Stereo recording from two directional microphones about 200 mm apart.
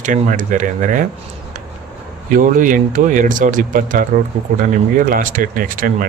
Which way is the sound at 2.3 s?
40° right (ahead or behind).